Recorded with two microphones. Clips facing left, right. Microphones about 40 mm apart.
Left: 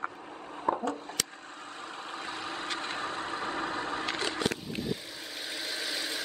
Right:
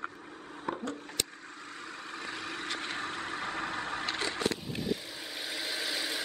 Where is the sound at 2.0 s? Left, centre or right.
Left.